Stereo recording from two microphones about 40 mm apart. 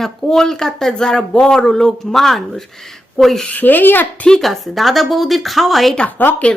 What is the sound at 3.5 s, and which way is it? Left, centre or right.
Speech, left.